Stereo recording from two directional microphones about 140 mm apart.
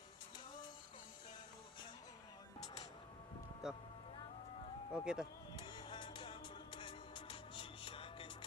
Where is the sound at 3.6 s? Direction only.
5° right (ahead or behind).